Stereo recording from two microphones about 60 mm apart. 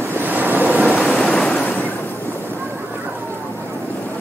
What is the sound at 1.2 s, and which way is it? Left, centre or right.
Waves, centre.